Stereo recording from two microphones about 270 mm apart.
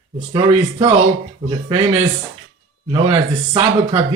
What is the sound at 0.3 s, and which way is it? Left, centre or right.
Speech, right.